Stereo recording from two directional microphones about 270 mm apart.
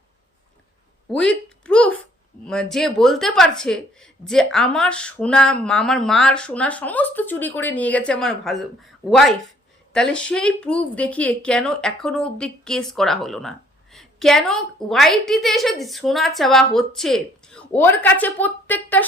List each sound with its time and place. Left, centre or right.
1.1 s a woman's voice: centre